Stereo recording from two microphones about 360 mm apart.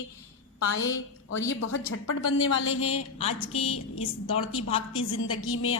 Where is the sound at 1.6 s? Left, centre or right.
Left.